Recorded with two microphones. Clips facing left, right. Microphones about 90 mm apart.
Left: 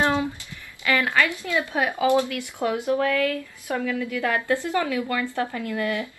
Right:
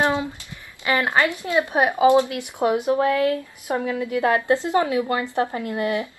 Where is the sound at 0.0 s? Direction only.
20° right (ahead or behind).